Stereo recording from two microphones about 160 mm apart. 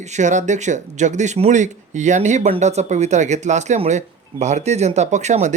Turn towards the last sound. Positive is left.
turn(degrees=-45)  # may be behind; listen again after turning